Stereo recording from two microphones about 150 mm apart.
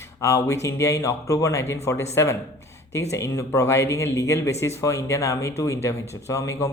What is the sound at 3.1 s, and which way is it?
Speech, 20° left (ahead or behind).